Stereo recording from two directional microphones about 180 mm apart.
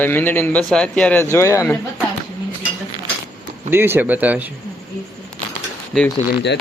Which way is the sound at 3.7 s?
10° right (ahead or behind).